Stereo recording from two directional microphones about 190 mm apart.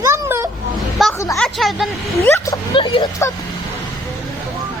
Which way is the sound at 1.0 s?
Centre (ahead or behind).